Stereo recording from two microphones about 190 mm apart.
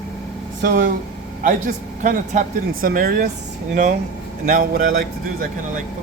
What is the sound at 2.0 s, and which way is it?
Speech, 45° right (ahead or behind).